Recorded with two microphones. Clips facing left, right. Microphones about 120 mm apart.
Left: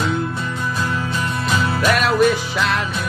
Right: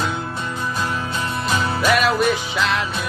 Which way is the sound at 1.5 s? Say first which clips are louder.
Left 1 dB; 30° right (ahead or behind).